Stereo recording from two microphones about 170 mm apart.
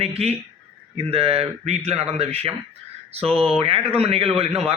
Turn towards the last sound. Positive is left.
turn(degrees=-35)  # may be behind; listen again after turning